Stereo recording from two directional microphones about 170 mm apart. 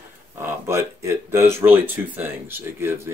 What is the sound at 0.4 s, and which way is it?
Speech, 15° right (ahead or behind).